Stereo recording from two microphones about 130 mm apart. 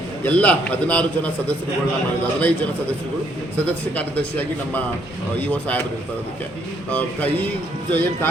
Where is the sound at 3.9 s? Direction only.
10° left (ahead or behind).